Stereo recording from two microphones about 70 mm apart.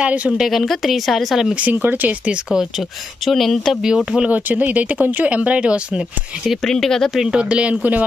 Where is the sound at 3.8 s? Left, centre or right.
Centre.